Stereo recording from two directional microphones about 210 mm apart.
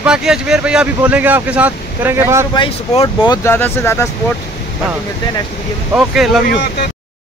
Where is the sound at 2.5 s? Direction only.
20° left (ahead or behind).